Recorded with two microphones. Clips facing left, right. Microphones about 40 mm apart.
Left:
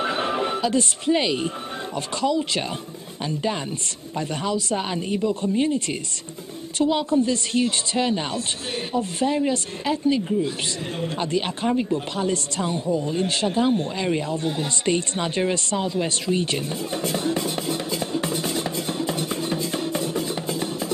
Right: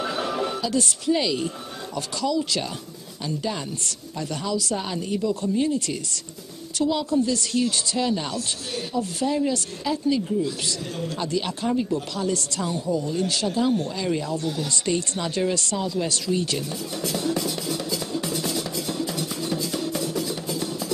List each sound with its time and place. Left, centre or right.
0.0 s music: left
2.0 s speech: left
4.5 s speech: left
6.8 s speech: left